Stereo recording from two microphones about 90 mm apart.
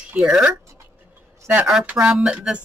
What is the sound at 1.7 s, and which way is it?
Speech, 10° right (ahead or behind).